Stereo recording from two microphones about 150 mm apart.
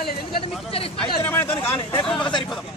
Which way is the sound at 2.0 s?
5° left (ahead or behind).